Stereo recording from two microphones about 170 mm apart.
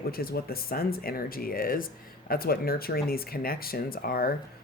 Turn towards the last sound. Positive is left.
turn(degrees=60)  # may be behind; listen again after turning